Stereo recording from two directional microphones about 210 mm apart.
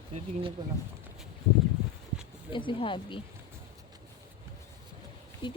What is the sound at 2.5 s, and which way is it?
Speech, 25° left (ahead or behind).